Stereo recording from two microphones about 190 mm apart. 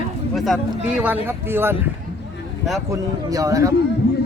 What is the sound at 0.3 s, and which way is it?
Speech, centre (ahead or behind).